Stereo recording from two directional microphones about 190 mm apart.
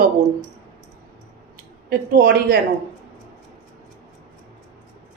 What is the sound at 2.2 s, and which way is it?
Speech, 50° right (ahead or behind).